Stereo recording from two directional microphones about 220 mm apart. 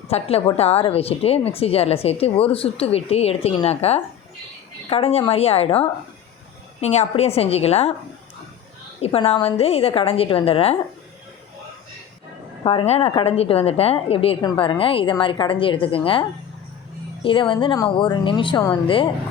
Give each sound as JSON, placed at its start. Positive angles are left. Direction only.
{"t": 0.1, "sound": "speech", "side_deg": 25}
{"t": 9.0, "sound": "speech", "side_deg": 25}
{"t": 12.6, "sound": "speech", "side_deg": 25}
{"t": 17.2, "sound": "speech", "side_deg": 20}